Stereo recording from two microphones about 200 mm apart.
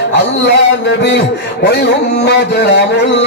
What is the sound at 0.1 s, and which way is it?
A man's voice, 60° left (ahead or behind).